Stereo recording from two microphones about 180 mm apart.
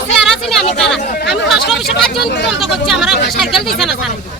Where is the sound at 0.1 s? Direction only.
Centre (ahead or behind).